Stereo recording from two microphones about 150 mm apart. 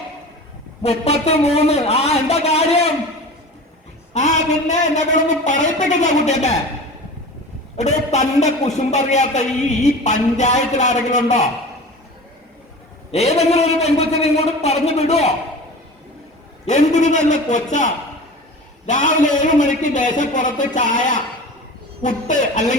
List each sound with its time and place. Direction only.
0.8 s a man's voice: 45° left (ahead or behind)
4.1 s a man's voice: 50° left (ahead or behind)
7.8 s a man's voice: 50° left (ahead or behind)
13.1 s a man's voice: 45° left (ahead or behind)
16.6 s a man's voice: 50° left (ahead or behind)